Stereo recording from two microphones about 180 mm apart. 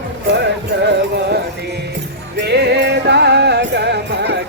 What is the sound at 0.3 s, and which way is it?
Music, 70° right (ahead or behind).